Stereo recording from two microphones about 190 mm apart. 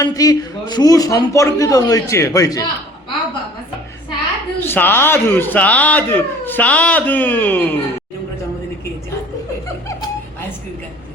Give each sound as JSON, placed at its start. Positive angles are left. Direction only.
{"t": 0.0, "sound": "a man's voice", "side_deg": 20}
{"t": 4.6, "sound": "speech", "side_deg": 10}